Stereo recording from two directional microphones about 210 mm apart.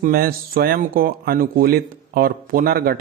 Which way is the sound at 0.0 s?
45° right (ahead or behind).